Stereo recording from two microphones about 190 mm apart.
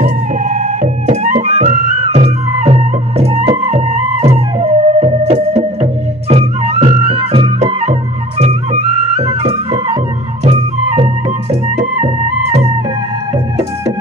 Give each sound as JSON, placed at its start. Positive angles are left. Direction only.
{"t": 0.0, "sound": "music", "side_deg": -40}